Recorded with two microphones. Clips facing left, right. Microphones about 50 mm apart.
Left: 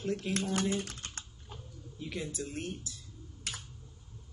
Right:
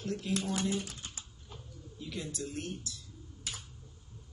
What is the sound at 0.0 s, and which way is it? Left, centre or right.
Speech, left.